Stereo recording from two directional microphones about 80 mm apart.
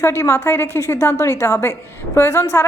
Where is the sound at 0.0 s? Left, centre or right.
Left.